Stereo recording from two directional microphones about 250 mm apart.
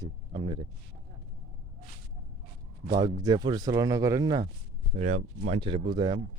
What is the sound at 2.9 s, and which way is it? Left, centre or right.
Speech, centre.